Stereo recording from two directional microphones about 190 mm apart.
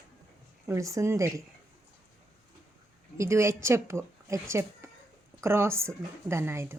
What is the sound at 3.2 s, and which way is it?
A woman's voice, 15° right (ahead or behind).